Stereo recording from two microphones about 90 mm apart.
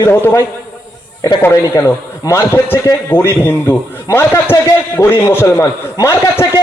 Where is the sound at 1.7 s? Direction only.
35° left (ahead or behind).